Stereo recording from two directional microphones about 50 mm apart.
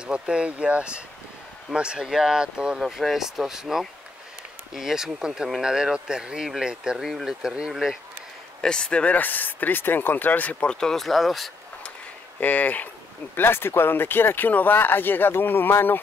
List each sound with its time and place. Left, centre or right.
0.0 s speech: centre
2.8 s speech: centre
7.0 s speech: centre
8.5 s speech: centre
10.8 s speech: centre
12.4 s speech: left
13.4 s speech: left